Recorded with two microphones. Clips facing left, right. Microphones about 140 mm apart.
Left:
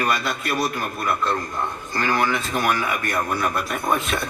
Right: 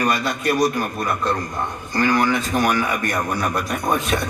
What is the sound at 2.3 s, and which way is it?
A man's voice, 20° right (ahead or behind).